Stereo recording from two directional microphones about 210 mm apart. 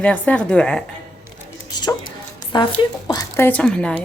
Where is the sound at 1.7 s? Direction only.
20° left (ahead or behind).